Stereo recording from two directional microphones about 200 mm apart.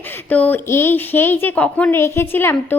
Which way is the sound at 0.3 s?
10° left (ahead or behind).